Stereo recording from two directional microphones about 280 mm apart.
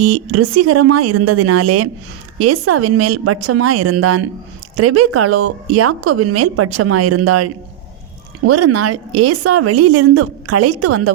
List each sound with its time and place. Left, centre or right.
0.0 s a woman's voice: right